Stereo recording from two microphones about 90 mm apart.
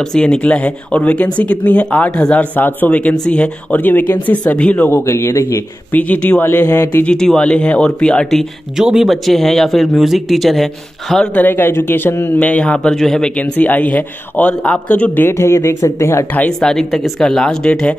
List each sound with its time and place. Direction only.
0.1 s a man's voice: 10° left (ahead or behind)
4.9 s speech: 30° left (ahead or behind)
5.9 s a man's voice: 15° left (ahead or behind)
6.4 s a man's voice: 20° left (ahead or behind); by 8.5 s 5° left (ahead or behind)
8.7 s speech: 5° right (ahead or behind)
11.3 s speech: 20° left (ahead or behind)
12.4 s a man's voice: 15° left (ahead or behind)
15.2 s speech: 30° left (ahead or behind)
16.3 s speech: 10° left (ahead or behind)